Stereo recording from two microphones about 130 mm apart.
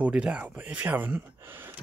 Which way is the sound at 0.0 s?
10° right (ahead or behind).